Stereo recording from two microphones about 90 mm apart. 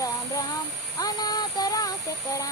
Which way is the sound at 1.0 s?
50° left (ahead or behind).